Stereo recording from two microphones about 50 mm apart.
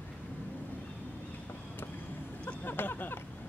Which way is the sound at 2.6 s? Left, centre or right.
Left.